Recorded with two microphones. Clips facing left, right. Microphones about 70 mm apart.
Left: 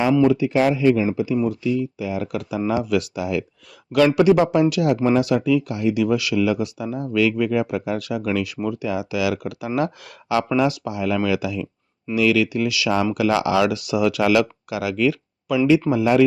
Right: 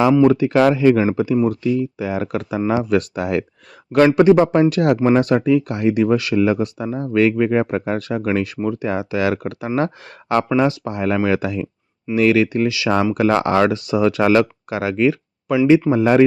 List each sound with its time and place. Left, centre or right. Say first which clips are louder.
0.3 s speech: right 4 dB; right
3.9 s speech: right 3 dB; right
13.1 s speech: right 3 dB; right